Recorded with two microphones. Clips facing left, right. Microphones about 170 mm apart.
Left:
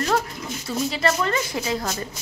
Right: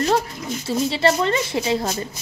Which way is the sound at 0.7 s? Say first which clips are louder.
Right 4 dB; 30° right (ahead or behind).